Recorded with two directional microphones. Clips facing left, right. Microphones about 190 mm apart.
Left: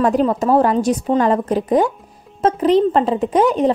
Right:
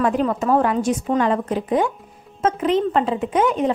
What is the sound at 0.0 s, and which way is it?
A woman's voice, 35° left (ahead or behind).